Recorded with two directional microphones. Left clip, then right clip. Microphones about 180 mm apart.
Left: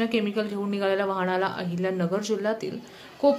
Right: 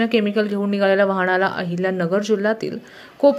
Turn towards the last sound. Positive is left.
turn(degrees=-30)  # may be behind; listen again after turning